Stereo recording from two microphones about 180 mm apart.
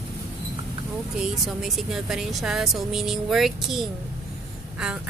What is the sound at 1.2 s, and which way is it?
A woman's voice, centre (ahead or behind).